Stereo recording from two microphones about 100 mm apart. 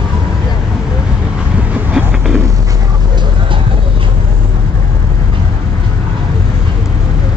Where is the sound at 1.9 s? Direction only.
5° right (ahead or behind).